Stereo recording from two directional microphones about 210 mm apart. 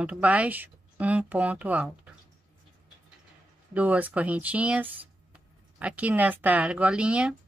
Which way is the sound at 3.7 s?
5° right (ahead or behind).